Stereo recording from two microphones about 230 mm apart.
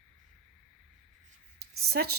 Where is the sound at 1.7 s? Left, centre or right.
Right.